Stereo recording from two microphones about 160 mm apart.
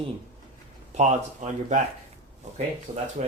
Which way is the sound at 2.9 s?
25° right (ahead or behind).